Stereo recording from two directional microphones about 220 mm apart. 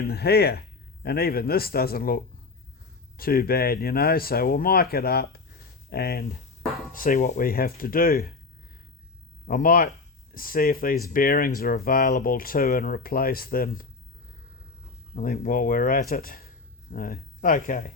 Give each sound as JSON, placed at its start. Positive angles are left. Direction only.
{"t": 0.0, "sound": "speech", "side_deg": 45}
{"t": 9.5, "sound": "speech", "side_deg": 40}
{"t": 15.1, "sound": "speech", "side_deg": 40}